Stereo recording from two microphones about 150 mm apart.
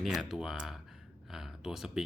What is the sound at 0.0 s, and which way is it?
Speech, centre (ahead or behind).